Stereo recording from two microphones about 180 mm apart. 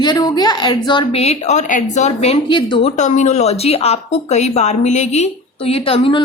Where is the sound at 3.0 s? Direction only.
40° left (ahead or behind).